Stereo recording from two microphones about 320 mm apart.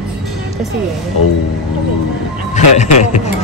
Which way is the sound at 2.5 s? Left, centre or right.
Left.